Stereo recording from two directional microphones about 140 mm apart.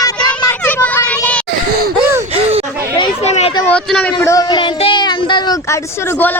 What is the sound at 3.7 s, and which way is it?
Speech, 5° left (ahead or behind).